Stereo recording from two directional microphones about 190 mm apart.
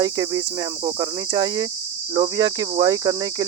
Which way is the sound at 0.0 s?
20° right (ahead or behind).